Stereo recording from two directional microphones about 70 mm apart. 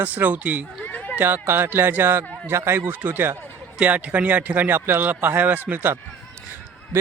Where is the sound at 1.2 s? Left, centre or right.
Right.